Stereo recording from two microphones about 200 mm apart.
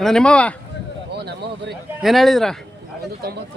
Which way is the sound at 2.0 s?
Centre (ahead or behind).